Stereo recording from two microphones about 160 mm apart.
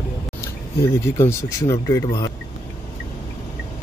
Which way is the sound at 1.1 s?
20° left (ahead or behind).